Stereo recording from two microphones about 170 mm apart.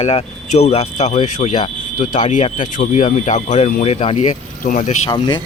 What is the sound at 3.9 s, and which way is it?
Speech, 35° left (ahead or behind).